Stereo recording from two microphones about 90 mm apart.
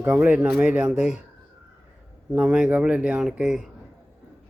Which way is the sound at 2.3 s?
10° right (ahead or behind).